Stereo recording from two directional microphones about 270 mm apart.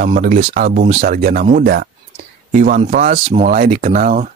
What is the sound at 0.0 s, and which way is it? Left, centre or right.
Speech, right.